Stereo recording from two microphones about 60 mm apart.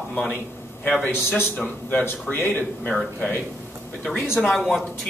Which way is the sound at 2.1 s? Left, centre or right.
Left.